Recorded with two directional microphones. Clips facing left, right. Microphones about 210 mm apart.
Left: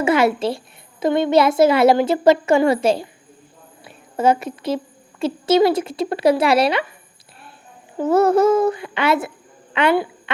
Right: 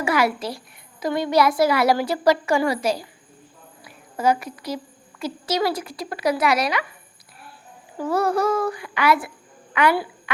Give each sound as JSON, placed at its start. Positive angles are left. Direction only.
{"t": 0.0, "sound": "a child's voice", "side_deg": 25}
{"t": 7.9, "sound": "a child's voice", "side_deg": 25}